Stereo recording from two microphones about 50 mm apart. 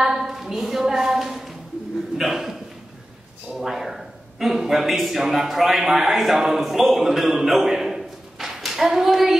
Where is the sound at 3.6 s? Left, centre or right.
Centre.